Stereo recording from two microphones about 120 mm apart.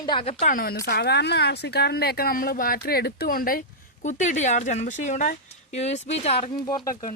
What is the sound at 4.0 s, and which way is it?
Speech, 90° left.